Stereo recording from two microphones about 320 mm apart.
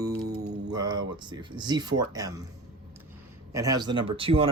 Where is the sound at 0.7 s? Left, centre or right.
Centre.